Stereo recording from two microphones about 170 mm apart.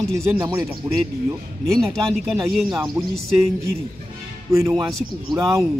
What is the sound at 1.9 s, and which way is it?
Speech, 5° left (ahead or behind).